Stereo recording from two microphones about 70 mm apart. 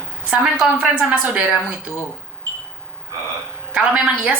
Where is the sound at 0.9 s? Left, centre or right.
Right.